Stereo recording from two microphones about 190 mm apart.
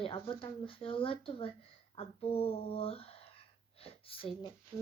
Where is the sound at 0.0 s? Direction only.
25° left (ahead or behind).